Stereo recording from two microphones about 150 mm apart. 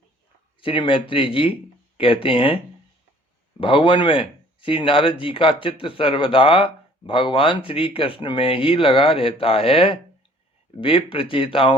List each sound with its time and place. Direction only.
0.6 s speech: 35° left (ahead or behind)
3.6 s speech: 35° left (ahead or behind)